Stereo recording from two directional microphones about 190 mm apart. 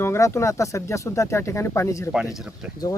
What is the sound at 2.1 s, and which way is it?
Speech, 5° right (ahead or behind).